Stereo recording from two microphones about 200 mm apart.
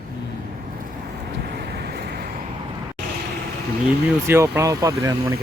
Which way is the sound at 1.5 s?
55° right (ahead or behind).